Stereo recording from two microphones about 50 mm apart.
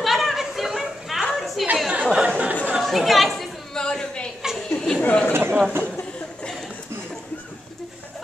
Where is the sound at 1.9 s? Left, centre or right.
Right.